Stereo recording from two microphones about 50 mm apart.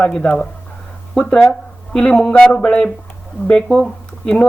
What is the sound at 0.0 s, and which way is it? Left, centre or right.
Speech, centre.